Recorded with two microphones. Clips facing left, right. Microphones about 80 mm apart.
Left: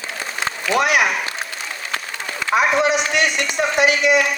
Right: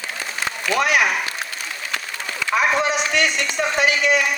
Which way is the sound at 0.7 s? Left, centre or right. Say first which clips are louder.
Left 2 dB; centre.